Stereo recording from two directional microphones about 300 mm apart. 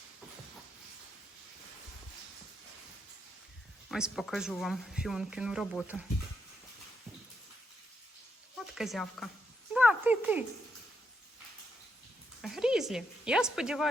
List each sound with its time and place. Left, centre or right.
3.8 s speech: centre
8.5 s speech: centre
9.7 s a sound: centre
12.4 s speech: centre